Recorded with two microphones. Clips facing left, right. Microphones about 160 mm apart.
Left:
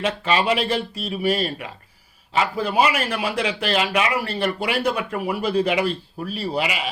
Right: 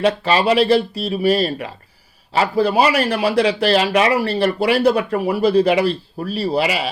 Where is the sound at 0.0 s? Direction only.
35° right (ahead or behind).